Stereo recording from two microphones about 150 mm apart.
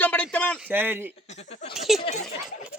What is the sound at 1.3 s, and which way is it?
Speech, 45° left (ahead or behind).